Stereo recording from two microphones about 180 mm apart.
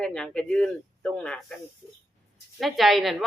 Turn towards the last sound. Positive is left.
turn(degrees=0)  # may be behind; listen again after turning